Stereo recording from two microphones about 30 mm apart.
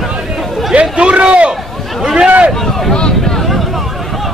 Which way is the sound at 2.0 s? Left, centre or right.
Right.